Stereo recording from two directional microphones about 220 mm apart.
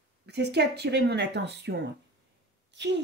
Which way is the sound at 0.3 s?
50° right (ahead or behind).